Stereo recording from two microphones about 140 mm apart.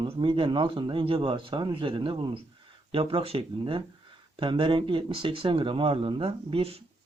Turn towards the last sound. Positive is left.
turn(degrees=-45)  # may be behind; listen again after turning